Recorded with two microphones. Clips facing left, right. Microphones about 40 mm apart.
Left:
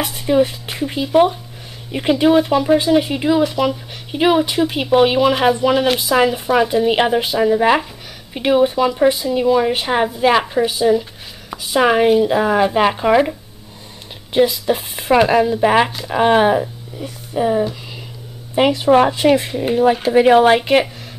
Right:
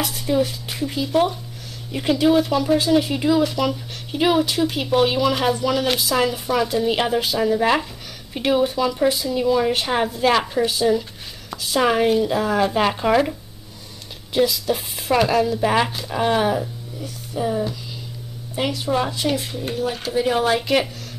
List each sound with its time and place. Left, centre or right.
0.0 s speech: left
18.7 s speech: left